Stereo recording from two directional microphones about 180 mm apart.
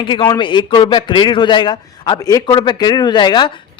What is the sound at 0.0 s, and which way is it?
A man's voice, 30° left (ahead or behind).